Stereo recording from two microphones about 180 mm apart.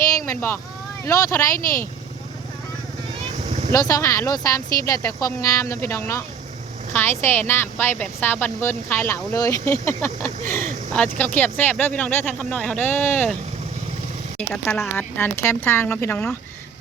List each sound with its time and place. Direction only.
0.3 s a woman's voice: 15° left (ahead or behind)
3.7 s a woman's voice: 20° left (ahead or behind)
14.3 s a woman's voice: 5° left (ahead or behind)